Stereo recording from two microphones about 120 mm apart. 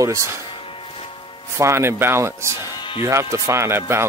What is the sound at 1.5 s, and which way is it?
Speech, 25° right (ahead or behind).